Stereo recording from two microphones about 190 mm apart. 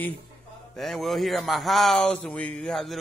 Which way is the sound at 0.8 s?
Centre (ahead or behind).